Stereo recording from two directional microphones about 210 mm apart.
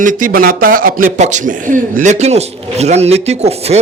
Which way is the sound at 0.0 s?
40° right (ahead or behind).